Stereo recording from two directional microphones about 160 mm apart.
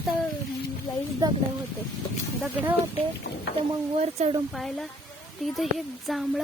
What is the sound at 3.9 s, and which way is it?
Speech, 40° right (ahead or behind).